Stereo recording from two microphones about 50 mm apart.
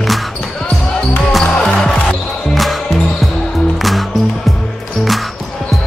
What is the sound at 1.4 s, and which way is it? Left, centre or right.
Music, centre.